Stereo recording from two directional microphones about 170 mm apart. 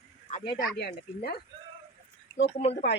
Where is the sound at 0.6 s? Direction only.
60° left (ahead or behind).